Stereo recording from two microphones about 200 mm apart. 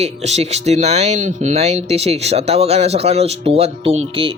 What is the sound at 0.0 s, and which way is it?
Speech, 35° right (ahead or behind).